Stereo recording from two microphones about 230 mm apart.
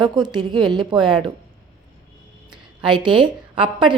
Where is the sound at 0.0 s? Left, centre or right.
Centre.